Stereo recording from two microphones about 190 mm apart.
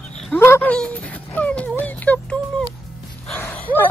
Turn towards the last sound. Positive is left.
turn(degrees=10)  # may be behind; listen again after turning